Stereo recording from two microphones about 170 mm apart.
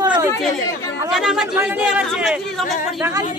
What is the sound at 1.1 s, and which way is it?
Speech, centre (ahead or behind).